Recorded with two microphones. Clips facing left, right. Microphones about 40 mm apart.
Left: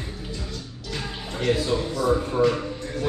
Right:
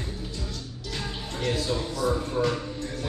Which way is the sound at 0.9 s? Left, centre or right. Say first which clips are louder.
Left 3 dB; centre.